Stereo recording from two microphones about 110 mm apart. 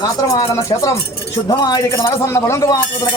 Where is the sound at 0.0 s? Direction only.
30° left (ahead or behind).